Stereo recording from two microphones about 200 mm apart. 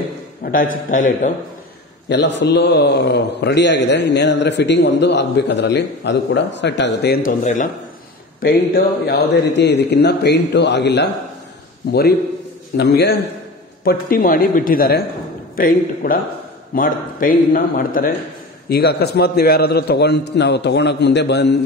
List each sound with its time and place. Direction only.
0.4 s a man's voice: 45° left (ahead or behind)
2.0 s a man's voice: 60° left (ahead or behind)
7.4 s a man's voice: 40° left (ahead or behind)
8.4 s a man's voice: 50° left (ahead or behind)
12.7 s a man's voice: 55° left (ahead or behind)